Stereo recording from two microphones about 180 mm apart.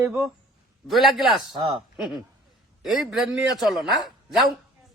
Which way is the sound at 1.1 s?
Centre (ahead or behind).